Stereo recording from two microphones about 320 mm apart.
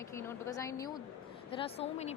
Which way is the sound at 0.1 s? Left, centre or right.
Centre.